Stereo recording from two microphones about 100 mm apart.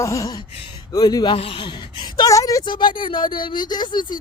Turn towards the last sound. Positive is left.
turn(degrees=45)  # may be behind; listen again after turning